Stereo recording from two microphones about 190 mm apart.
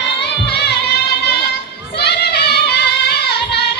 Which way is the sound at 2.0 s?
60° left (ahead or behind).